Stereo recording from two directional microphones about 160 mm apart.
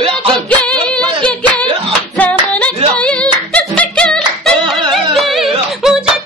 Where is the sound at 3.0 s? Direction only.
5° left (ahead or behind).